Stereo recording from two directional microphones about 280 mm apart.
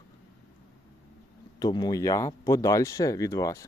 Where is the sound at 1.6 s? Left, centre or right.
Centre.